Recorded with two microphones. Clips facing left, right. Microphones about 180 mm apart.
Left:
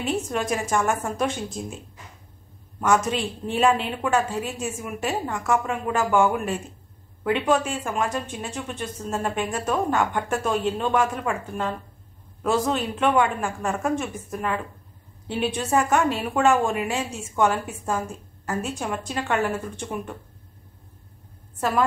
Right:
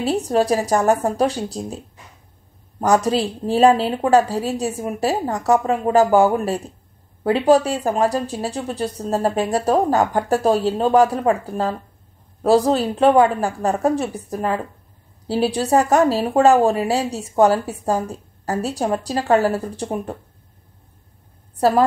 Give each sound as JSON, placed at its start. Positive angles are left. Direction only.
{"t": 0.0, "sound": "a woman's voice", "side_deg": -35}
{"t": 2.8, "sound": "a woman's voice", "side_deg": -35}
{"t": 21.5, "sound": "a woman's voice", "side_deg": -35}